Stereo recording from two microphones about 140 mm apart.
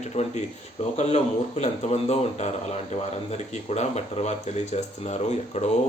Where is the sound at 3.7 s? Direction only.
50° left (ahead or behind).